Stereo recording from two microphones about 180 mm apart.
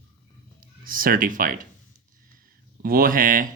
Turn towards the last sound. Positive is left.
turn(degrees=-50)  # may be behind; listen again after turning